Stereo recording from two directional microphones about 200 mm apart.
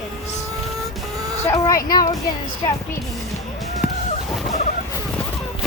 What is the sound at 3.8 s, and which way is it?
Chicken, 10° right (ahead or behind).